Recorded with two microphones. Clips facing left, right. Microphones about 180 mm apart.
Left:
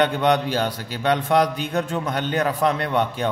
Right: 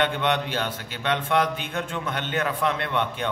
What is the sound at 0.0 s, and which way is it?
Speech, 40° left (ahead or behind).